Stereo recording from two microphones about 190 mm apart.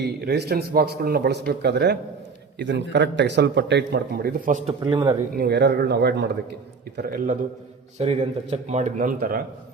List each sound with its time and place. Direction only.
0.0 s speech: 60° right (ahead or behind); by 4.7 s 40° right (ahead or behind)
4.8 s speech: 25° right (ahead or behind)
5.3 s a man's voice: 60° right (ahead or behind)
7.9 s speech: 35° right (ahead or behind); by 9.4 s 50° right (ahead or behind)